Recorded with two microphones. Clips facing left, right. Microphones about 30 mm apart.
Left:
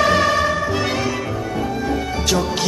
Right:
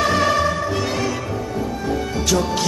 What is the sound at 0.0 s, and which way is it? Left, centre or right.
Music, centre.